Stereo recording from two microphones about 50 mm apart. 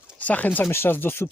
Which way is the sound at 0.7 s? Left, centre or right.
Left.